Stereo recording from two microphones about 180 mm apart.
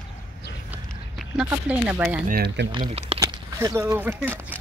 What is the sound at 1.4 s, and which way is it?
Speech, 10° right (ahead or behind).